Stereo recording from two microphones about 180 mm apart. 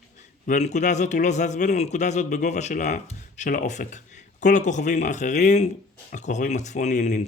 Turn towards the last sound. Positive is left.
turn(degrees=40)  # may be behind; listen again after turning